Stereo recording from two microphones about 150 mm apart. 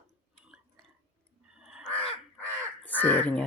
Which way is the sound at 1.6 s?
5° right (ahead or behind).